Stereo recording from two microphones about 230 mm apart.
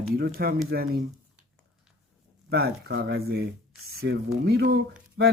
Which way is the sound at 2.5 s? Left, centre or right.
Right.